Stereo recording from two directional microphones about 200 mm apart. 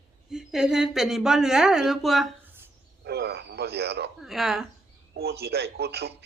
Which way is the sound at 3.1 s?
55° right (ahead or behind).